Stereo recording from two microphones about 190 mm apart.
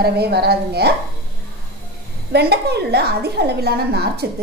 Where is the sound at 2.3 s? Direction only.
60° right (ahead or behind).